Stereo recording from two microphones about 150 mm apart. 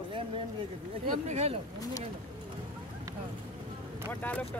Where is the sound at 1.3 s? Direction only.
45° right (ahead or behind).